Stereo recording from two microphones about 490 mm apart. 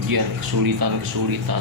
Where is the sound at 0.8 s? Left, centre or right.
Right.